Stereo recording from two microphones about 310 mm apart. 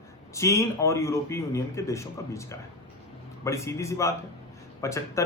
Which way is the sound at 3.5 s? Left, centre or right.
Centre.